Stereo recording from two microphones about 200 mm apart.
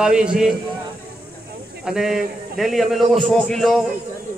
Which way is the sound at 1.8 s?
Centre (ahead or behind).